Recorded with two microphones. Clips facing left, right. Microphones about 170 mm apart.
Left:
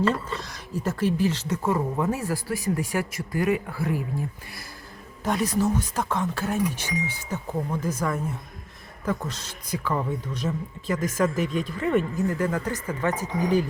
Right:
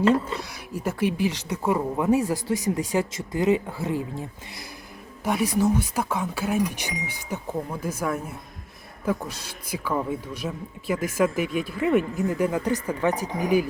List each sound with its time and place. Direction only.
0.0 s speech: 10° right (ahead or behind)
5.2 s speech: 10° right (ahead or behind)